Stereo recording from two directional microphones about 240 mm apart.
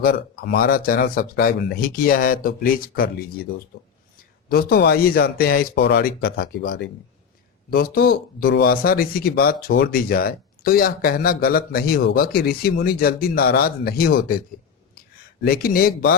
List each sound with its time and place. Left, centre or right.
0.0 s speech: left
4.4 s speech: left
14.9 s a sound: left